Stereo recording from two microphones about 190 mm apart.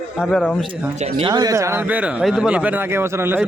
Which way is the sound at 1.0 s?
25° right (ahead or behind).